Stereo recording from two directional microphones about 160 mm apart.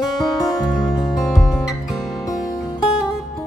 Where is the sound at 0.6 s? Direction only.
Centre (ahead or behind).